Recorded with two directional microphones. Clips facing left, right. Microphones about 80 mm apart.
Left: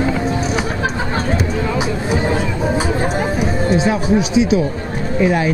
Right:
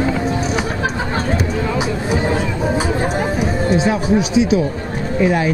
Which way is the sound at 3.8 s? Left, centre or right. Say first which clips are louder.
Even; centre.